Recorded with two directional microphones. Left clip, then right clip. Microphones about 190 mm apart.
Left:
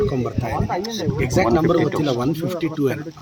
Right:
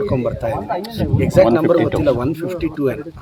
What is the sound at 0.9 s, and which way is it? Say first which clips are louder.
Speech: right 2 dB; 35° right (ahead or behind).